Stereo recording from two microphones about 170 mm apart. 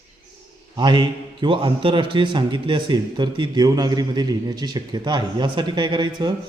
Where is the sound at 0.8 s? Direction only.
25° right (ahead or behind).